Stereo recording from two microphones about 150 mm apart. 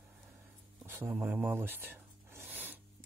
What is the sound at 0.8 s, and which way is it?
Rub, 15° right (ahead or behind).